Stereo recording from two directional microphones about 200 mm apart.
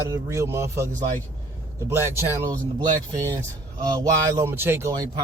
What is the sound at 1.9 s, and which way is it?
Speech, 10° right (ahead or behind).